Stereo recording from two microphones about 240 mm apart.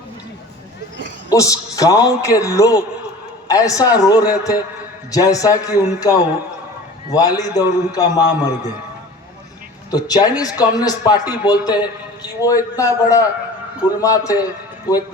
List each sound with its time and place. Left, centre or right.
1.3 s a man's voice: centre
9.9 s a man's voice: centre